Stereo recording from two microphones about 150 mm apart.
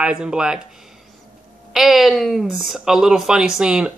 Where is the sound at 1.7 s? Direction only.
Centre (ahead or behind).